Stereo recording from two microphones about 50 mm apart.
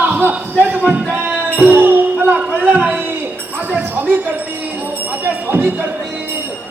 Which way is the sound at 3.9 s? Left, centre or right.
Right.